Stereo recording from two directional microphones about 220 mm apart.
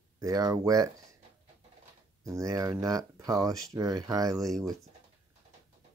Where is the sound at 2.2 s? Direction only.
15° right (ahead or behind).